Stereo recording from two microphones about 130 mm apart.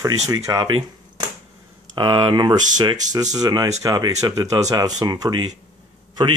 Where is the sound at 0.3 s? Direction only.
30° right (ahead or behind).